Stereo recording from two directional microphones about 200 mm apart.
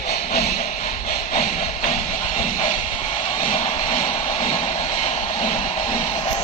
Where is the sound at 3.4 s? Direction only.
30° left (ahead or behind).